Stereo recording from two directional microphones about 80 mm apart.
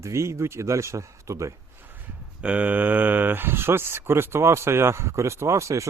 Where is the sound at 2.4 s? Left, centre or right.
Centre.